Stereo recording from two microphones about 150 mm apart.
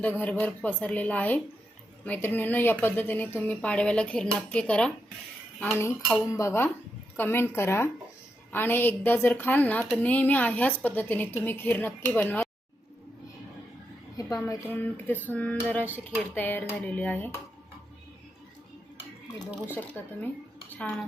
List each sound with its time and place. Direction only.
0.0 s a woman's voice: 10° left (ahead or behind)
14.2 s a woman's voice: 20° left (ahead or behind)
19.6 s a woman's voice: 15° left (ahead or behind)